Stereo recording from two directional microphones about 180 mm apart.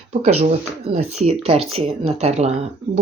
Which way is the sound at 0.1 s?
40° right (ahead or behind).